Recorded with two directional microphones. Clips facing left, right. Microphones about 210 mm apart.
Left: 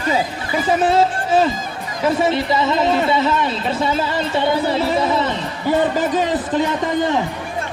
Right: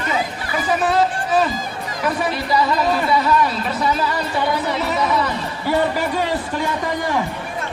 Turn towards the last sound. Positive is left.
turn(degrees=20)  # may be behind; listen again after turning